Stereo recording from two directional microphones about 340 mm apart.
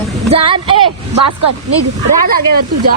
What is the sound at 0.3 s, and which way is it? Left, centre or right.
Speech, centre.